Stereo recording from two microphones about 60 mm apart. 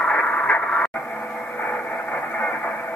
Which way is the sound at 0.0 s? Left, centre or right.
Left.